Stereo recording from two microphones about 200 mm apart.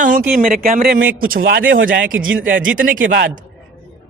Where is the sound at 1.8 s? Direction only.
45° right (ahead or behind).